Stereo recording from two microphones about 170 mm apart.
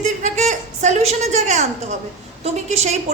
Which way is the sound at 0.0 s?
45° right (ahead or behind).